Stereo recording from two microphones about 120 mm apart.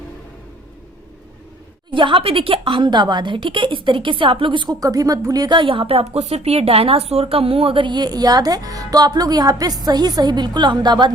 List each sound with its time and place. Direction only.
1.9 s a woman's voice: 45° right (ahead or behind)